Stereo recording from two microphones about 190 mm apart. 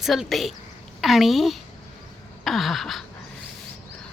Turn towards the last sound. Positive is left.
turn(degrees=0)  # may be behind; listen again after turning